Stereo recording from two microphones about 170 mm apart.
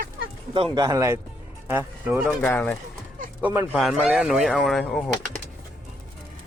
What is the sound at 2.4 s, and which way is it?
Speech, 10° left (ahead or behind).